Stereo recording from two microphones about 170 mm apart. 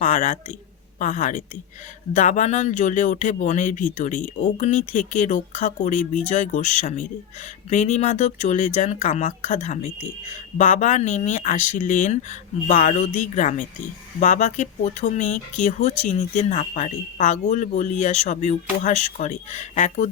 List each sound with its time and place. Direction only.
0.0 s speech: 45° left (ahead or behind)